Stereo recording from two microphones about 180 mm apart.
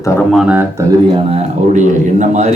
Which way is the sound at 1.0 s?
30° right (ahead or behind).